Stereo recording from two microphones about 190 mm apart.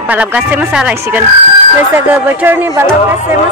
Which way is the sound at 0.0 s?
10° right (ahead or behind).